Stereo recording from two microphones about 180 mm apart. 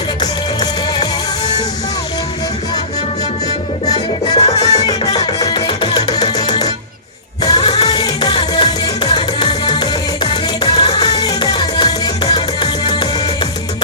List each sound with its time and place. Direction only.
0.2 s music: 25° left (ahead or behind)
3.8 s music: 20° left (ahead or behind)
4.4 s music: 35° left (ahead or behind)
4.6 s music: 20° left (ahead or behind)